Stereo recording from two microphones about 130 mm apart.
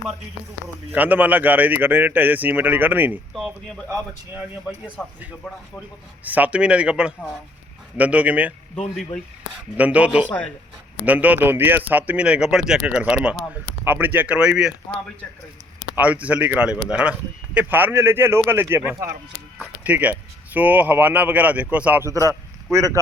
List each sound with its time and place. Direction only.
0.9 s a man's voice: 15° right (ahead or behind)
3.3 s speech: centre (ahead or behind)
5.0 s speech: 15° left (ahead or behind)
6.2 s a man's voice: 10° right (ahead or behind)
9.7 s a man's voice: 10° right (ahead or behind)
16.0 s a man's voice: 10° right (ahead or behind)
22.0 s a man's voice: 25° right (ahead or behind)